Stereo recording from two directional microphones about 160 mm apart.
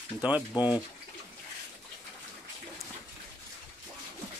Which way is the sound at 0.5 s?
25° left (ahead or behind).